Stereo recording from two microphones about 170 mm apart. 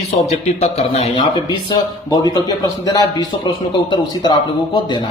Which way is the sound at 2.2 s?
20° left (ahead or behind).